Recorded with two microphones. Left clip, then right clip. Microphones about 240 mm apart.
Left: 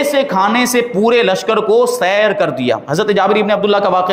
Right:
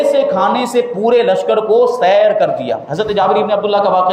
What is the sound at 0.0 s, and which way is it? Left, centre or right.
A man's voice, left.